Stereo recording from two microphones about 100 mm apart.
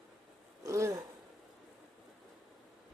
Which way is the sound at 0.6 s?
30° right (ahead or behind).